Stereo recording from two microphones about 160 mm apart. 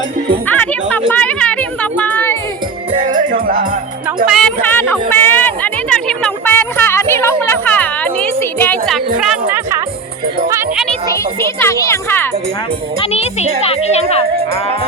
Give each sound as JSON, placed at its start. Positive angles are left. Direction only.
{"t": 0.4, "sound": "music", "side_deg": 10}
{"t": 1.1, "sound": "a sound", "side_deg": 10}
{"t": 3.0, "sound": "music", "side_deg": -55}
{"t": 4.3, "sound": "speech", "side_deg": 0}
{"t": 4.6, "sound": "a sound", "side_deg": 10}
{"t": 11.3, "sound": "speech", "side_deg": 20}
{"t": 13.1, "sound": "a child's voice", "side_deg": 40}